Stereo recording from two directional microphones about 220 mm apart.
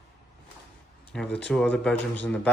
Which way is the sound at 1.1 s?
5° left (ahead or behind).